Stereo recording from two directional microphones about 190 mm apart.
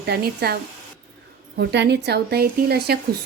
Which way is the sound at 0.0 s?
60° right (ahead or behind).